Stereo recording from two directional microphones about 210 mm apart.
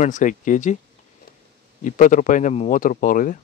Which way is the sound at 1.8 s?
40° left (ahead or behind).